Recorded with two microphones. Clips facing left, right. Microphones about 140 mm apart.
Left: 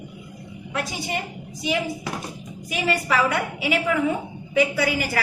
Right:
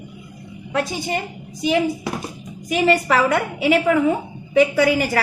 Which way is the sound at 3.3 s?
40° right (ahead or behind).